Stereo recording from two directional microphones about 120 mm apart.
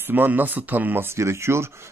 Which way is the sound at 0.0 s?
15° right (ahead or behind).